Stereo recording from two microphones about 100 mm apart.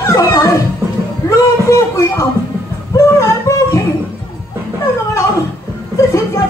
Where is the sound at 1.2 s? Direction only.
30° left (ahead or behind).